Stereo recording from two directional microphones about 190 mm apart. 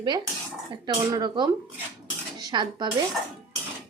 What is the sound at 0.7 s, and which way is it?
Speech, 25° right (ahead or behind).